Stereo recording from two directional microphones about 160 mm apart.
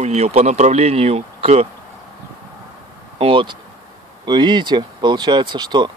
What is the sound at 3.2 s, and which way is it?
Speech, 30° right (ahead or behind).